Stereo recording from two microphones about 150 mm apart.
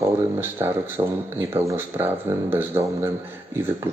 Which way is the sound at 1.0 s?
30° right (ahead or behind).